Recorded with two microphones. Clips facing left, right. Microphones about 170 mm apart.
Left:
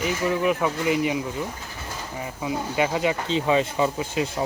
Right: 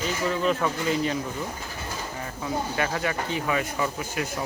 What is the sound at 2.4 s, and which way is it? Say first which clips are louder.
Speech: left 3 dB; 15° left (ahead or behind).